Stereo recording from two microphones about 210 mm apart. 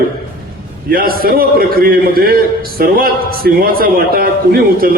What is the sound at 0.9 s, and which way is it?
A man's voice, 45° right (ahead or behind).